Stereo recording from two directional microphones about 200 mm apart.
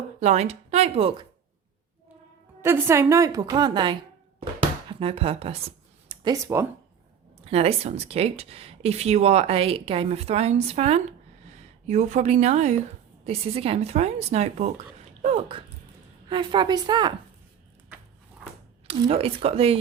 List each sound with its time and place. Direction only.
0.2 s speech: 35° right (ahead or behind)
2.6 s a woman's voice: 10° right (ahead or behind)
4.9 s a sound: 30° right (ahead or behind)
6.3 s a woman's voice: 15° right (ahead or behind)
7.4 s speech: 30° right (ahead or behind)
18.9 s speech: 30° right (ahead or behind)